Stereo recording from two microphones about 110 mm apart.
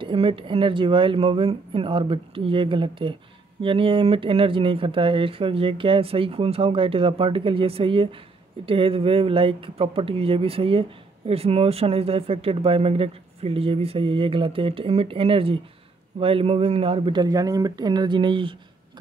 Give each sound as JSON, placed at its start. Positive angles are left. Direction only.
{"t": 0.0, "sound": "speech", "side_deg": -50}
{"t": 17.1, "sound": "speech", "side_deg": -35}